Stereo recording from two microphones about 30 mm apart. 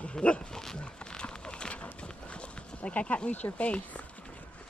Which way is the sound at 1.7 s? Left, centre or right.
Left.